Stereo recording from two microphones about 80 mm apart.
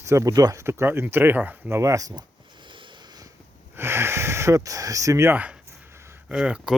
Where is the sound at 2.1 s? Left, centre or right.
Right.